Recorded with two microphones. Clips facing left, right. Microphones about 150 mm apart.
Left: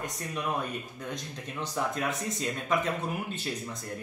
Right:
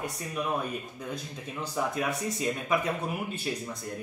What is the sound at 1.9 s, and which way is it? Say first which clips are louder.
Speech: right 1 dB; 10° right (ahead or behind).